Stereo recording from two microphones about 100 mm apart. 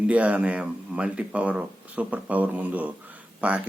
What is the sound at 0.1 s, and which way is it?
Speech, 15° right (ahead or behind).